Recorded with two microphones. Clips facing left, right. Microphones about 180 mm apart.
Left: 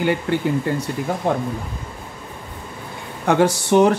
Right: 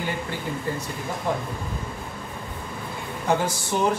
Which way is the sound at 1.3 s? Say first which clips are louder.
Left 5 dB; 65° left (ahead or behind).